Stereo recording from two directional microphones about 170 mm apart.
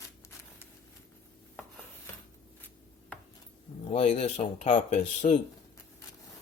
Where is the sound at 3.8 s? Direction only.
35° left (ahead or behind).